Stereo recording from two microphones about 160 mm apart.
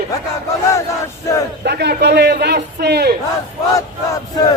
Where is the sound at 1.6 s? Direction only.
90° right.